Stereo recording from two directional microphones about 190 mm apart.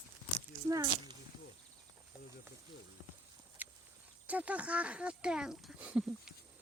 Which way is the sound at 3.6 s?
10° right (ahead or behind).